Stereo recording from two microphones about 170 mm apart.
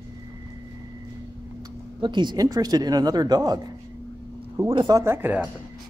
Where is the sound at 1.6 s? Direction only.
25° right (ahead or behind); by 5.5 s 10° right (ahead or behind).